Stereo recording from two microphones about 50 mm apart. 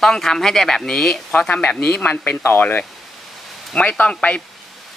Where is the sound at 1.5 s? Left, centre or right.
Left.